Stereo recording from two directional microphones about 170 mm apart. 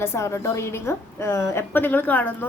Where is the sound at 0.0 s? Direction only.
15° left (ahead or behind).